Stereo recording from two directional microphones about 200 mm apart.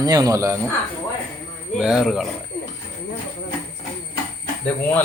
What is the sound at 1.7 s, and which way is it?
Speech, 5° right (ahead or behind).